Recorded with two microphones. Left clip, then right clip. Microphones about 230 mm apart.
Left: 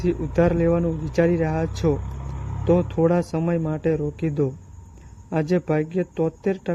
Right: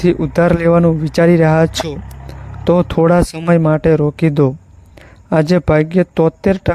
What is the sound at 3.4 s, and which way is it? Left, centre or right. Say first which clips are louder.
Speech: right 11 dB; right.